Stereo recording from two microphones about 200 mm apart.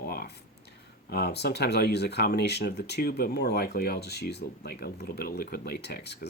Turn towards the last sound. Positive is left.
turn(degrees=55)  # may be behind; listen again after turning